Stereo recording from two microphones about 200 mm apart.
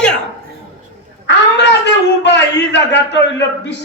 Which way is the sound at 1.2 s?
60° left (ahead or behind).